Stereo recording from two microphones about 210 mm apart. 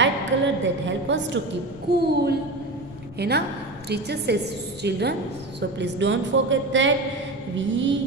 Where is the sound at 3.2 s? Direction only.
50° right (ahead or behind).